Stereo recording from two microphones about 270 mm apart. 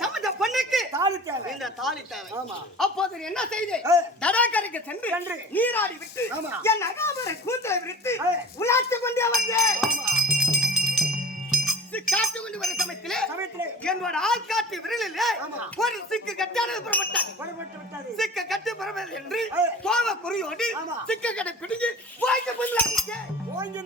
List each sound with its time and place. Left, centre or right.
0.0 s a sound: centre
1.6 s speech: centre
9.8 s music: centre
11.5 s speech: centre